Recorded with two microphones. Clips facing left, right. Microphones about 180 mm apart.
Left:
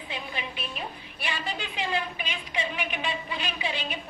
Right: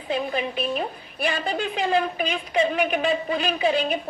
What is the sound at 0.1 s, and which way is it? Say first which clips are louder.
A woman's voice: right 12 dB; 45° right (ahead or behind).